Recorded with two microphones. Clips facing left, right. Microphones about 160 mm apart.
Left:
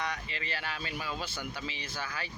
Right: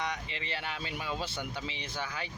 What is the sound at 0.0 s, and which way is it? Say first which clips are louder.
Speech: even; 20° right (ahead or behind).